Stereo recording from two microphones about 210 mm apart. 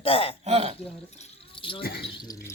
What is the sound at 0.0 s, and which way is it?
Speech, 25° left (ahead or behind).